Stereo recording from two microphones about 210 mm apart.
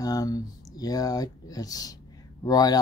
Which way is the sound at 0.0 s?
15° left (ahead or behind).